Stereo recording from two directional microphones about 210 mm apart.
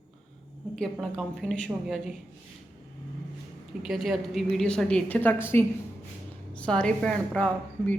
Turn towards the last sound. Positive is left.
turn(degrees=5)  # may be behind; listen again after turning